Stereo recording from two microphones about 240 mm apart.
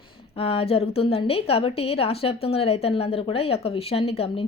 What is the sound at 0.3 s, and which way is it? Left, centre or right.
A woman's voice, left.